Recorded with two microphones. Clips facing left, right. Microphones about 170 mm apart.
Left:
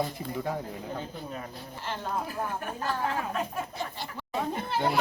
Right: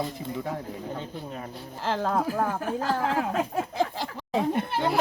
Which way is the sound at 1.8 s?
90° right.